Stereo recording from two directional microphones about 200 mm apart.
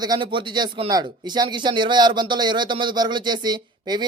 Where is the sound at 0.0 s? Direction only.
20° right (ahead or behind).